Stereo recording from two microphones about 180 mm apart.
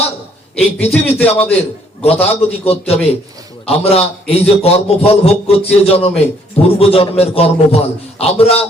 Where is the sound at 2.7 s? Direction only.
35° left (ahead or behind).